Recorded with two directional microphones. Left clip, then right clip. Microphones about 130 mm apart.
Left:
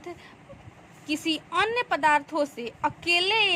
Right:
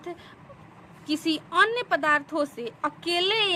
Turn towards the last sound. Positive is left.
turn(degrees=15)  # may be behind; listen again after turning